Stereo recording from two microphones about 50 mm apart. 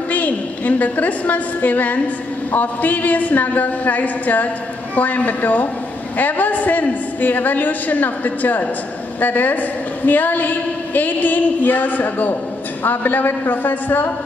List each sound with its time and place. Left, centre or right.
0.1 s a woman's voice: left